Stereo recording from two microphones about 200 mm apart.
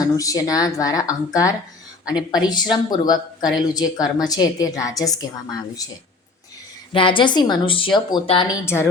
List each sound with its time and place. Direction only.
0.0 s a woman's voice: 15° left (ahead or behind)
6.9 s a woman's voice: 25° left (ahead or behind)
8.6 s speech: 10° left (ahead or behind)